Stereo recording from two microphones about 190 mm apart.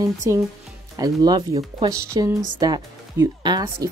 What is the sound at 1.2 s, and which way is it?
Speech, 20° right (ahead or behind).